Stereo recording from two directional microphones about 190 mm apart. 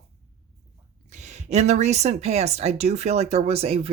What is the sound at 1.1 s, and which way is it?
Speech, 35° right (ahead or behind).